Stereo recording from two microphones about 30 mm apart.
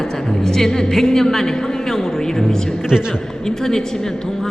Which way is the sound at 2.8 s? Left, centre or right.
Right.